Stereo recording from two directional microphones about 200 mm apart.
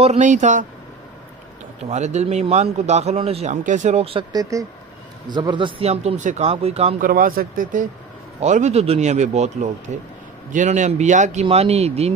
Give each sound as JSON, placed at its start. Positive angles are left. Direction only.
{"t": 0.0, "sound": "a man's voice", "side_deg": -35}
{"t": 1.9, "sound": "a man's voice", "side_deg": -35}
{"t": 7.0, "sound": "a man's voice", "side_deg": -45}